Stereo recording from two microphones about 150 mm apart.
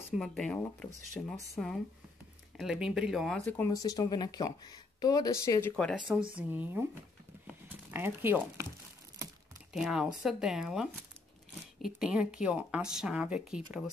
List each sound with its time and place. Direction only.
0.1 s speech: 5° left (ahead or behind)
2.5 s speech: 5° right (ahead or behind)
3.7 s speech: 25° left (ahead or behind)
5.9 s speech: 5° right (ahead or behind)
9.7 s speech: 5° right (ahead or behind)